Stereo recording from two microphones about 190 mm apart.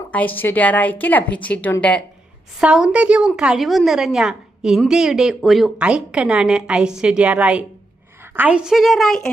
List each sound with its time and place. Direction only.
0.1 s a woman's voice: 10° left (ahead or behind)
2.6 s a woman's voice: 5° right (ahead or behind)